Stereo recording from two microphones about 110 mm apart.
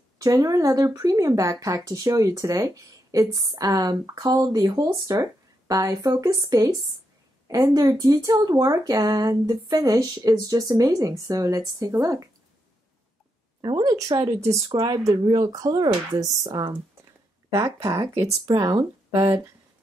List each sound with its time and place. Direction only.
0.2 s speech: 35° right (ahead or behind)
13.6 s speech: 45° right (ahead or behind)
17.8 s speech: 30° right (ahead or behind)
18.4 s speech: 40° right (ahead or behind)